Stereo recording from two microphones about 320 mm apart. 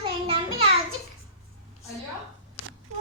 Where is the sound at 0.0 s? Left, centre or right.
Centre.